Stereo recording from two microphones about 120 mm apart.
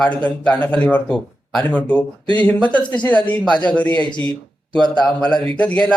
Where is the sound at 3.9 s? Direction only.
40° left (ahead or behind).